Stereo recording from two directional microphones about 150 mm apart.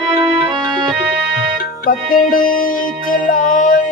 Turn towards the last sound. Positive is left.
turn(degrees=60)  # may be behind; listen again after turning